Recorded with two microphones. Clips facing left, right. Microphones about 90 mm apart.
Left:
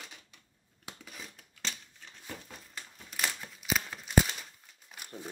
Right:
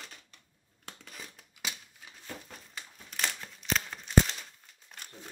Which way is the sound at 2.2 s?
Centre (ahead or behind).